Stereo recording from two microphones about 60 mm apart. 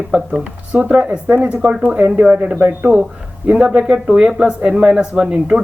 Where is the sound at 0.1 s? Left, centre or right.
Centre.